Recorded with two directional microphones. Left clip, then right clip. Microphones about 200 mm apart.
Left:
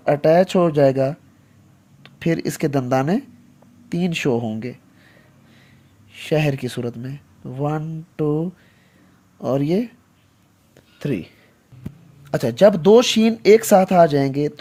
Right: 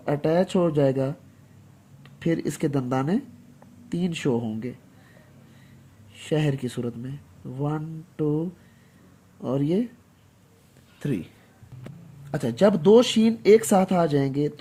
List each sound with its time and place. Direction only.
0.0 s speech: 35° left (ahead or behind)
6.1 s speech: 35° left (ahead or behind)
11.0 s speech: 30° left (ahead or behind)
12.3 s speech: 35° left (ahead or behind)